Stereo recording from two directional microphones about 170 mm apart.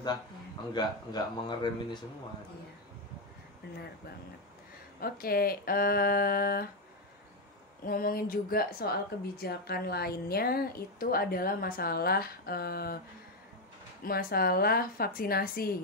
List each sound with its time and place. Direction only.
0.7 s speech: 25° left (ahead or behind)
5.0 s speech: 60° left (ahead or behind)
7.8 s speech: 55° left (ahead or behind)
14.0 s speech: 60° left (ahead or behind)